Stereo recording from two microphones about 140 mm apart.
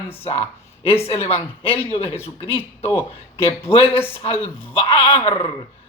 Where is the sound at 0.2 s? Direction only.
45° left (ahead or behind).